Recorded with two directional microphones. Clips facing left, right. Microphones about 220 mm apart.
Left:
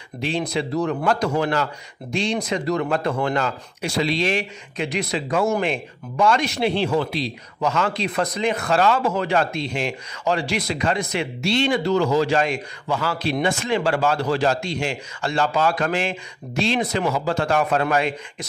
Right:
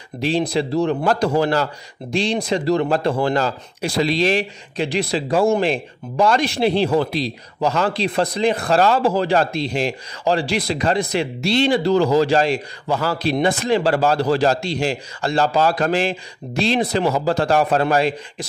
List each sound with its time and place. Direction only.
0.2 s a man's voice: 35° right (ahead or behind)